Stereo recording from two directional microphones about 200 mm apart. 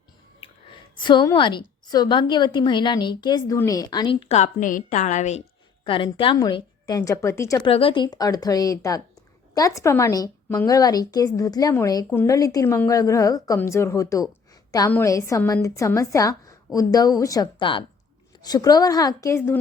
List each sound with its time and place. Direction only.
0.3 s a woman's voice: 25° left (ahead or behind)
5.8 s a woman's voice: 25° left (ahead or behind)
7.7 s a woman's voice: 25° left (ahead or behind)